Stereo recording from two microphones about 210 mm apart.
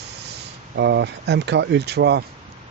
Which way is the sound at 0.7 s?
55° right (ahead or behind).